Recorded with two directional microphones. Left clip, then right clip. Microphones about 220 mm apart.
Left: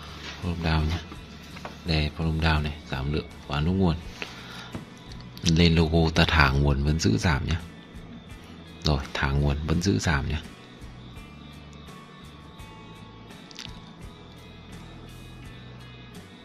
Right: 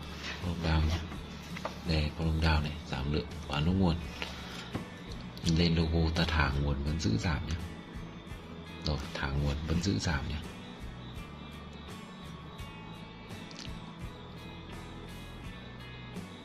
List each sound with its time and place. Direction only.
0.7 s speech: 20° left (ahead or behind)
5.4 s speech: 30° left (ahead or behind)
8.8 s speech: 30° left (ahead or behind)